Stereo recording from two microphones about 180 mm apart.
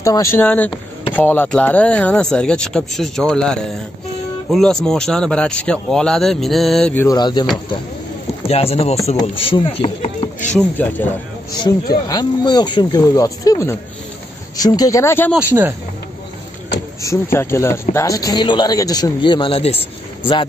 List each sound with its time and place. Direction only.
0.0 s speech: 15° left (ahead or behind)
7.2 s a man's voice: 25° left (ahead or behind)
8.5 s chopping: 35° left (ahead or behind)
9.1 s speech: 30° left (ahead or behind)
10.8 s speech: 10° left (ahead or behind)
11.5 s a man's voice: 20° left (ahead or behind)
17.0 s a man's voice: 15° left (ahead or behind)